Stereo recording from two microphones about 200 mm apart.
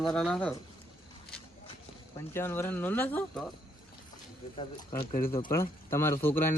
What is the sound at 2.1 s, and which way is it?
Speech, 10° left (ahead or behind).